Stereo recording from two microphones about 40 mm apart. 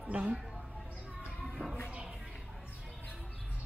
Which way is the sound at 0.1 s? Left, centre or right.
Right.